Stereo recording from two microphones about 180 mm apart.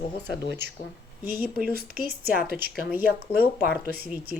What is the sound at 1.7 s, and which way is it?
Speech, 55° right (ahead or behind).